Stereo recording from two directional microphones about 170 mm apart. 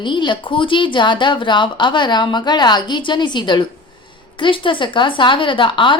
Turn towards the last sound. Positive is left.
turn(degrees=30)  # may be behind; listen again after turning